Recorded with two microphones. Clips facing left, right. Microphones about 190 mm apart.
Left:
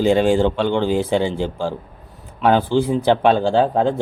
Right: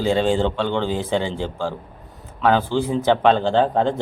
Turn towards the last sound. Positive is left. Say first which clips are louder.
# left 2 dB
turn(degrees=5)  # may be behind; listen again after turning